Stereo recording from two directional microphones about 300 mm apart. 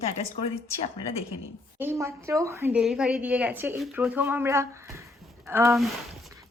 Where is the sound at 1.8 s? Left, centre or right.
Centre.